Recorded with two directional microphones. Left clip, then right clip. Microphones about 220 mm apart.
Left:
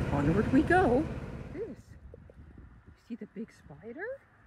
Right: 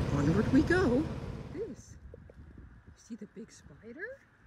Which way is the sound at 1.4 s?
5° right (ahead or behind).